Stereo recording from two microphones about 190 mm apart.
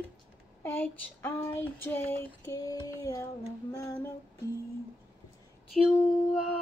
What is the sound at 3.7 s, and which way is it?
Music, 15° left (ahead or behind).